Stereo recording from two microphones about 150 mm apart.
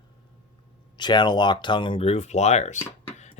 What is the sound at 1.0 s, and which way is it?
Speech, 30° left (ahead or behind).